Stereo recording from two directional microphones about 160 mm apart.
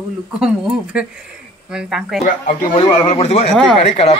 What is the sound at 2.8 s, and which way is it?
Speech, 40° left (ahead or behind).